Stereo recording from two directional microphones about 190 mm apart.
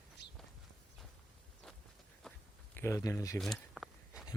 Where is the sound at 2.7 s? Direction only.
15° left (ahead or behind).